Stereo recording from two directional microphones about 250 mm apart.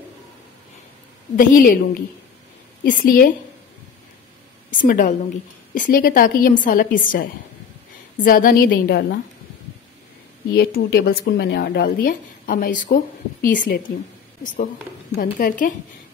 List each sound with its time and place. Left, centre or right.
1.3 s speech: left
2.8 s speech: left
4.8 s speech: left
10.5 s speech: left
15.1 s speech: left